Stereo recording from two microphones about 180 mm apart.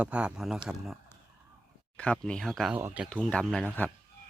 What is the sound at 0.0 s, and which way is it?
Speech, 5° right (ahead or behind).